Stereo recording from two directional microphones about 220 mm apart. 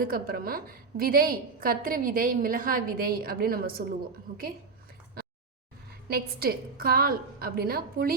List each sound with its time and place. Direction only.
0.0 s a woman's voice: 40° right (ahead or behind)
5.2 s a sound: 45° right (ahead or behind)
6.1 s a woman's voice: 45° right (ahead or behind)